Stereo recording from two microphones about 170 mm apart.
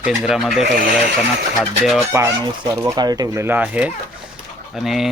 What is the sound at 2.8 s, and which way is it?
Speech, 25° right (ahead or behind).